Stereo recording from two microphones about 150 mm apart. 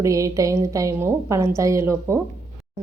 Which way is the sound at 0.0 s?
20° right (ahead or behind).